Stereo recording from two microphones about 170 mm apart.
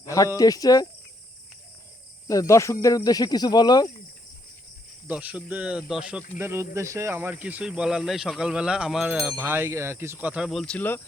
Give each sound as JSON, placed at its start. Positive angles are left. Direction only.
{"t": 0.0, "sound": "speech", "side_deg": 20}
{"t": 2.2, "sound": "speech", "side_deg": 20}
{"t": 5.0, "sound": "speech", "side_deg": -10}